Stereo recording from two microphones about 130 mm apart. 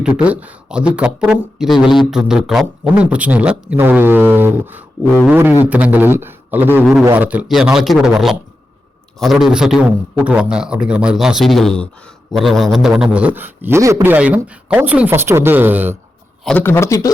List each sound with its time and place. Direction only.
0.0 s a man's voice: 10° right (ahead or behind)
16.4 s a man's voice: 5° left (ahead or behind)
16.6 s speech: 20° left (ahead or behind)